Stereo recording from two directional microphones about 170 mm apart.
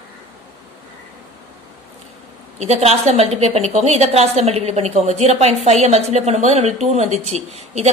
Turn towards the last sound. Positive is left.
turn(degrees=-40)  # may be behind; listen again after turning